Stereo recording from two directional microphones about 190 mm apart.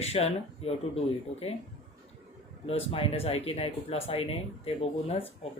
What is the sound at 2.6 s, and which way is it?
Speech, 30° left (ahead or behind).